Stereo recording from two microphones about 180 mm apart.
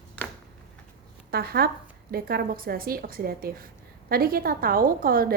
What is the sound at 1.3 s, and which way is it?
A woman's voice, 60° right (ahead or behind).